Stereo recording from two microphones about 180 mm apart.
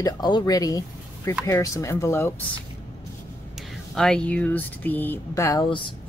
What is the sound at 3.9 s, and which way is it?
Speech, 5° left (ahead or behind).